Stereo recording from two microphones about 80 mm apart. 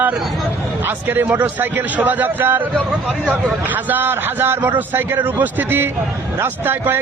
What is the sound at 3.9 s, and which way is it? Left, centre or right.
A man's voice, right.